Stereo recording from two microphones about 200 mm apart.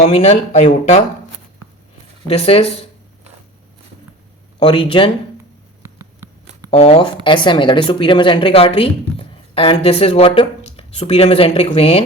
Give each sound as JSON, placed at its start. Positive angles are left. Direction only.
{"t": 0.0, "sound": "speech", "side_deg": 35}
{"t": 2.2, "sound": "speech", "side_deg": 30}
{"t": 4.6, "sound": "speech", "side_deg": 25}
{"t": 5.8, "sound": "a sound", "side_deg": -15}
{"t": 6.7, "sound": "speech", "side_deg": 30}